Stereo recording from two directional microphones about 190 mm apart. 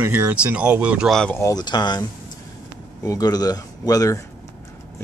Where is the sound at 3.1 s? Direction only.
20° left (ahead or behind).